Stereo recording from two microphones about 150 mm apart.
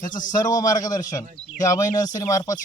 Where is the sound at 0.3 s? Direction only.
25° left (ahead or behind).